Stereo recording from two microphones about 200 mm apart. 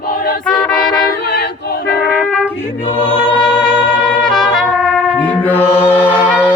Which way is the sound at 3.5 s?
55° left (ahead or behind).